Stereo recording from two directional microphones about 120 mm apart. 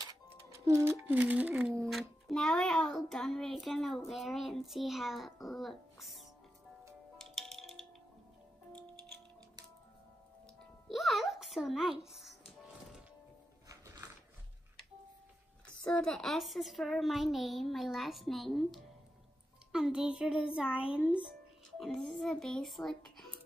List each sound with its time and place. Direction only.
0.5 s speech: 25° right (ahead or behind)
1.0 s a woman's voice: 15° right (ahead or behind)
1.9 s music: centre (ahead or behind)
10.6 s music: centre (ahead or behind)
13.7 s music: 30° right (ahead or behind)
15.6 s music: 10° left (ahead or behind)
19.7 s a woman's voice: 5° right (ahead or behind)
21.6 s music: centre (ahead or behind)